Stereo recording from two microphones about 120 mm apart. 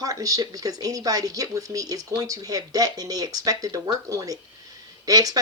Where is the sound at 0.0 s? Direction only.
30° right (ahead or behind).